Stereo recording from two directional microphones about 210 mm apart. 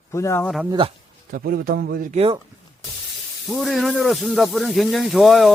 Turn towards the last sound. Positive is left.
turn(degrees=0)  # may be behind; listen again after turning